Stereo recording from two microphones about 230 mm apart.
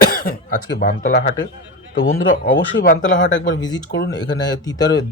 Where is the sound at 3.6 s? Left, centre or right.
Centre.